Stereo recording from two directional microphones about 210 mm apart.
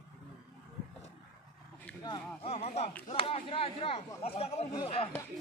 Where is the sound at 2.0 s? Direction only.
30° left (ahead or behind).